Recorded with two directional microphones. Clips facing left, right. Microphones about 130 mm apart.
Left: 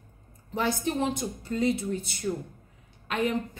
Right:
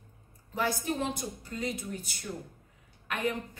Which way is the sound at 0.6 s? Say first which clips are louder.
Left 3 dB; 25° left (ahead or behind).